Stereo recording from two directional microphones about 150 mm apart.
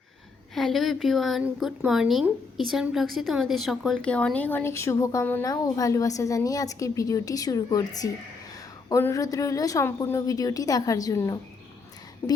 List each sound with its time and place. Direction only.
0.5 s a woman's voice: centre (ahead or behind); by 12.4 s 15° left (ahead or behind)